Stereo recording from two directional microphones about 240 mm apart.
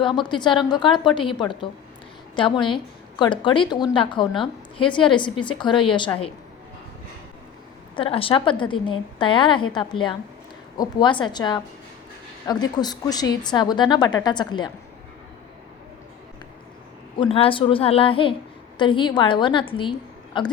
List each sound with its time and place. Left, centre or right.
0.0 s a woman's voice: centre
7.9 s a woman's voice: left
17.2 s a woman's voice: left